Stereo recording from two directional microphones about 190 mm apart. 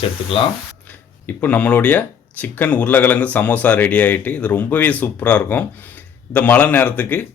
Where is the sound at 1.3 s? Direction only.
10° left (ahead or behind).